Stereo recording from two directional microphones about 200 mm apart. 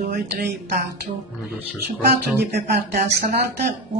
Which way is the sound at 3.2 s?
50° right (ahead or behind).